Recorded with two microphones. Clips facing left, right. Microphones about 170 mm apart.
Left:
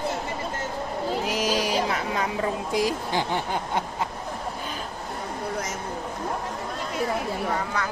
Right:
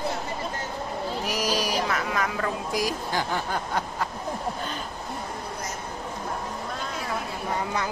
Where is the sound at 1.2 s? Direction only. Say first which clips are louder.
Even; 25° left (ahead or behind).